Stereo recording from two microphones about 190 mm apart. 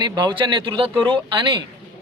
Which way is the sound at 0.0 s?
25° right (ahead or behind).